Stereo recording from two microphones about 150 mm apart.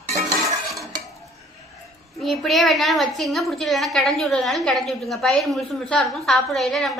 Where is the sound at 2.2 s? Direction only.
Centre (ahead or behind).